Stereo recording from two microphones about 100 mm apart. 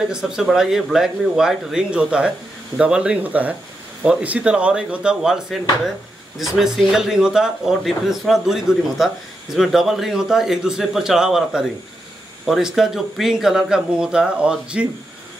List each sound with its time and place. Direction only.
0.1 s speech: 5° right (ahead or behind)